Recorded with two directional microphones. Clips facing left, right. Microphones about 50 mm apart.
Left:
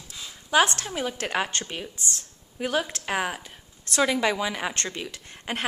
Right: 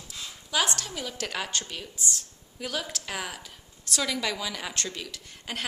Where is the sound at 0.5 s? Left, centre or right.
Left.